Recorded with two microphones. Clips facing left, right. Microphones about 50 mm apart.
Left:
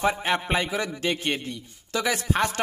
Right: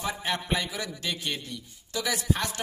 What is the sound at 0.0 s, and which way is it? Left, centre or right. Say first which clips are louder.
A man's voice: left 7 dB; left.